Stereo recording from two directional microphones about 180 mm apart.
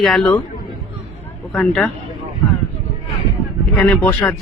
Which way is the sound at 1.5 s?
5° left (ahead or behind).